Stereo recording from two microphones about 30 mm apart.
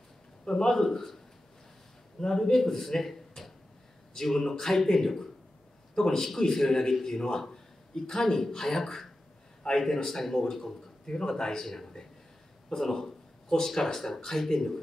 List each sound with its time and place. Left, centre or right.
0.7 s speech: centre
2.1 s a man's voice: centre
11.6 s speech: centre